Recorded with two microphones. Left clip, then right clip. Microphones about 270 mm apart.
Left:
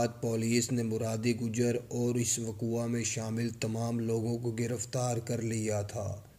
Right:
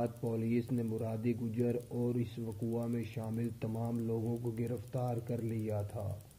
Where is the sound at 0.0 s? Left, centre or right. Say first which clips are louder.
Left 5 dB; left.